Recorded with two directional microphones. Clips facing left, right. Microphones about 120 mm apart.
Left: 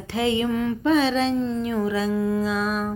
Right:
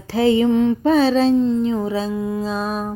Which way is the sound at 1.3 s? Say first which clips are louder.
Right 6 dB; 20° right (ahead or behind).